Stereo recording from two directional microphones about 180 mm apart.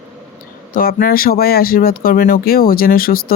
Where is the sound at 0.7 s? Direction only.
55° left (ahead or behind).